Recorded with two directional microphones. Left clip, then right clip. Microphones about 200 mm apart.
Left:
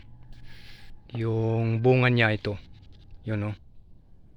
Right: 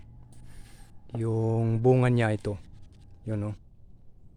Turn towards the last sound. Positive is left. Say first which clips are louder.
# left 2 dB
turn(degrees=0)  # may be behind; listen again after turning